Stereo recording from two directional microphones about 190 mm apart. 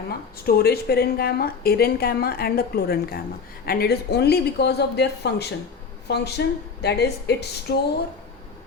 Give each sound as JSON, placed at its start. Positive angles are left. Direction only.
{"t": 0.4, "sound": "a woman's voice", "side_deg": 55}